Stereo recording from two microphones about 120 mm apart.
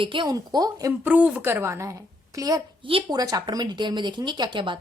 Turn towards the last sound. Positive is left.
turn(degrees=-40)  # may be behind; listen again after turning